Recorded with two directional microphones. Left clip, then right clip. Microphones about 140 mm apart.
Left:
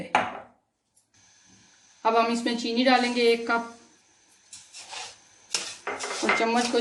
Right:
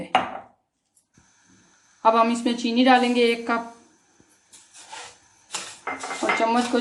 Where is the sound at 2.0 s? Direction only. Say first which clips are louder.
Right 4 dB; 55° right (ahead or behind).